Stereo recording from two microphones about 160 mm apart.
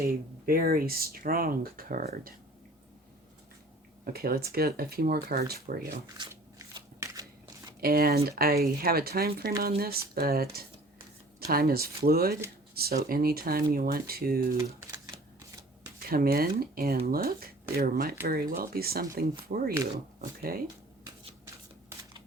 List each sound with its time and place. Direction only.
0.0 s speech: 65° right (ahead or behind)
4.0 s speech: 70° right (ahead or behind)
6.1 s crunch: 20° right (ahead or behind)
7.8 s speech: 70° right (ahead or behind)
16.0 s speech: 70° right (ahead or behind)
19.5 s speech: 60° right (ahead or behind)